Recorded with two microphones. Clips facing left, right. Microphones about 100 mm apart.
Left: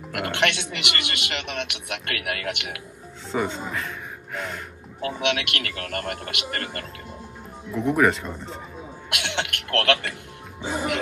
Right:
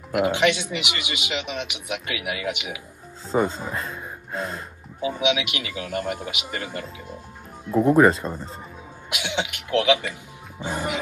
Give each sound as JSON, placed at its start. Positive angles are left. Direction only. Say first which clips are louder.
{"t": 0.1, "sound": "a man's voice", "louder": "right 5 dB", "side_deg": -5}
{"t": 3.3, "sound": "speech", "louder": "right 3 dB", "side_deg": -35}
{"t": 5.2, "sound": "a man's voice", "louder": "right 1 dB", "side_deg": -5}
{"t": 7.7, "sound": "speech", "louder": "right 5 dB", "side_deg": -35}
{"t": 9.1, "sound": "a man's voice", "louder": "right 1 dB", "side_deg": -5}